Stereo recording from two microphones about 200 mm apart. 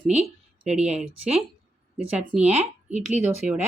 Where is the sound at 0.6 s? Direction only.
5° right (ahead or behind).